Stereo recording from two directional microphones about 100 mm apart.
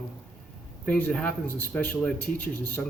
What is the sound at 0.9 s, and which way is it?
Speech, 15° left (ahead or behind).